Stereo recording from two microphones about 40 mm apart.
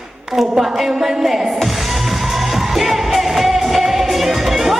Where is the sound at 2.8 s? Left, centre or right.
Centre.